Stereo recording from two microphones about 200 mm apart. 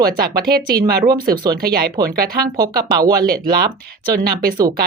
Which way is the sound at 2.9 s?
20° right (ahead or behind).